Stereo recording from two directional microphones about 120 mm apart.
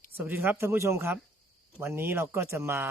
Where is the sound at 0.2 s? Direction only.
15° right (ahead or behind).